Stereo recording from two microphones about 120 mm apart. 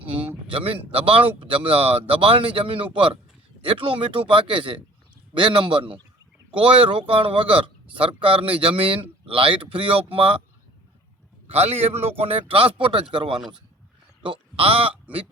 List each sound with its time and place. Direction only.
0.5 s speech: 50° right (ahead or behind)
11.5 s speech: 60° right (ahead or behind)